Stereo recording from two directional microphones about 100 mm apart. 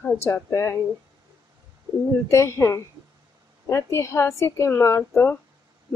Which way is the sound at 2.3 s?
30° left (ahead or behind).